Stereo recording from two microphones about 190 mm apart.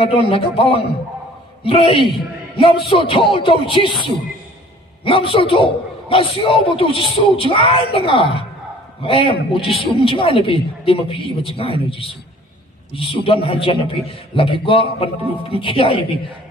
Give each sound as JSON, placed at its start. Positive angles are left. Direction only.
{"t": 0.0, "sound": "a man's voice", "side_deg": 30}